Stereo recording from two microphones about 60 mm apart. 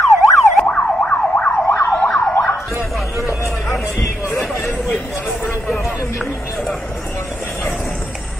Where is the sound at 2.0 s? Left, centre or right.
Left.